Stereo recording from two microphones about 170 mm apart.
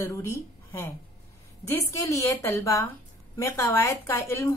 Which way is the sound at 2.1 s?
15° left (ahead or behind).